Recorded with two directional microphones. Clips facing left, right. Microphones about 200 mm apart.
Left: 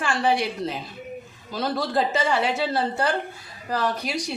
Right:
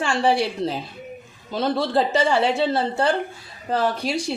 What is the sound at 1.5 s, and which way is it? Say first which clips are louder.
A woman's voice: right 4 dB; 25° right (ahead or behind).